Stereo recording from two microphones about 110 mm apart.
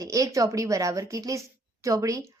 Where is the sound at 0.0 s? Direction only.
30° right (ahead or behind).